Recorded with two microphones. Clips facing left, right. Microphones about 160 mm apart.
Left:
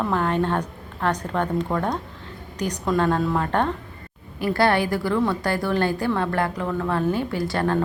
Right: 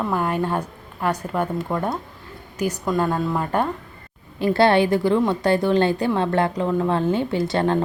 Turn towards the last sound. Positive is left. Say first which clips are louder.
# right 3 dB
turn(degrees=-25)  # may be behind; listen again after turning